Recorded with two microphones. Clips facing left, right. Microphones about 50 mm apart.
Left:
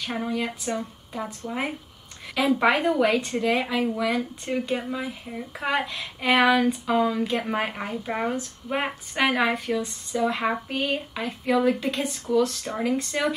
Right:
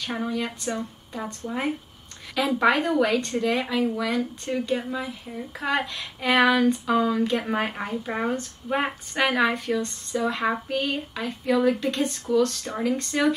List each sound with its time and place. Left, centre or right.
0.0 s a woman's voice: centre